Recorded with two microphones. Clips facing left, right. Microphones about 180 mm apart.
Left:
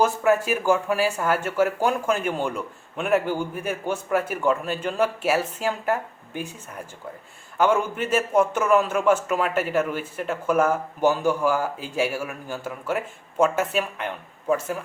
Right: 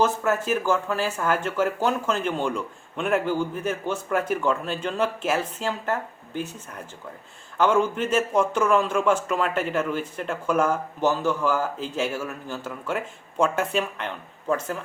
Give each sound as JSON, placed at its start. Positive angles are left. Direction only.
{"t": 0.0, "sound": "speech", "side_deg": 10}
{"t": 7.6, "sound": "speech", "side_deg": 10}